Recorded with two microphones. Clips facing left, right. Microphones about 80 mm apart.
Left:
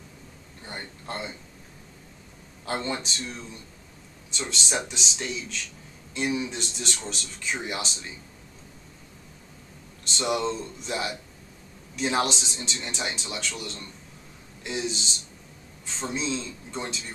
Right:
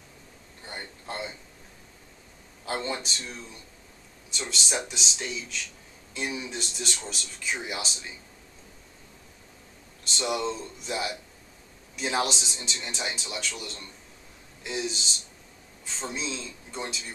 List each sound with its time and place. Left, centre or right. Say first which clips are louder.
0.7 s a man's voice: left 1 dB; centre
2.6 s speech: left 1 dB; centre
10.1 s speech: left 2 dB; centre
16.1 s speech: left 5 dB; centre